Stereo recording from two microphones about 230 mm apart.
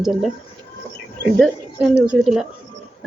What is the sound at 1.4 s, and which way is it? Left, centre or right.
A woman's voice, centre.